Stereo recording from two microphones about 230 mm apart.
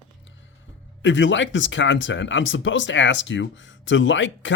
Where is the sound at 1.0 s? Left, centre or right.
Left.